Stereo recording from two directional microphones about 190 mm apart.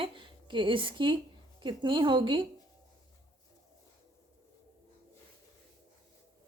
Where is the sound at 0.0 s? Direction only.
25° right (ahead or behind).